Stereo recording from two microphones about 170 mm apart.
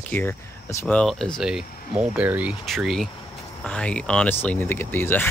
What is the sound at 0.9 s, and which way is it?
Speech, 5° left (ahead or behind).